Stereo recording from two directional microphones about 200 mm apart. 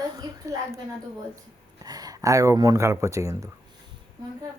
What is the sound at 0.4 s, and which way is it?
Speech, 15° right (ahead or behind).